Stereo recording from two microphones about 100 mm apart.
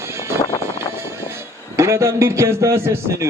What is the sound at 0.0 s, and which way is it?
Music, 30° right (ahead or behind).